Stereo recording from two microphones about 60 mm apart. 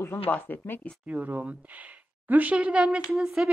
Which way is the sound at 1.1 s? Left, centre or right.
Right.